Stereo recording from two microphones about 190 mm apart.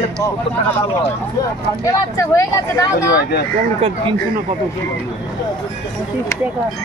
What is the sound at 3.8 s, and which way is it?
Speech, 30° right (ahead or behind).